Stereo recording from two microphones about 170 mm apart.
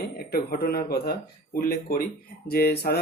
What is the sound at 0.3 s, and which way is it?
Speech, 65° left (ahead or behind).